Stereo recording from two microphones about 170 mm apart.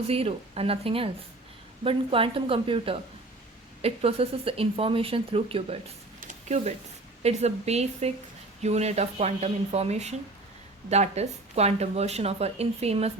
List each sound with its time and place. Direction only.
0.1 s speech: 35° right (ahead or behind)
6.1 s a sound: 45° right (ahead or behind)
7.2 s speech: 40° right (ahead or behind)